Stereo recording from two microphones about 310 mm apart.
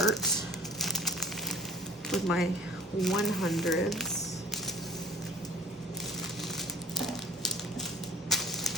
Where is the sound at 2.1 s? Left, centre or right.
Centre.